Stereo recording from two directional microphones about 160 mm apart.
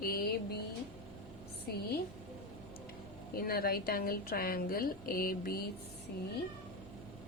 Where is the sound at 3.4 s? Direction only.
70° left (ahead or behind).